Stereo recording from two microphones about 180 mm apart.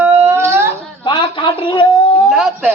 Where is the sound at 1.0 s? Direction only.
25° left (ahead or behind).